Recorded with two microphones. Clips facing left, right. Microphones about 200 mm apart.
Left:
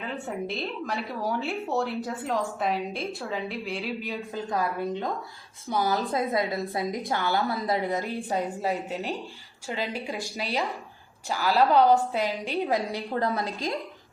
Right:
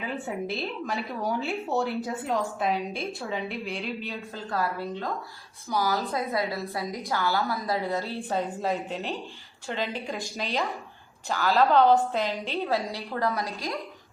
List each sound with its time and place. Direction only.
0.0 s speech: centre (ahead or behind)
4.0 s a woman's voice: 15° left (ahead or behind)
6.8 s speech: centre (ahead or behind)
7.1 s a woman's voice: 20° left (ahead or behind)
11.3 s a woman's voice: 10° left (ahead or behind)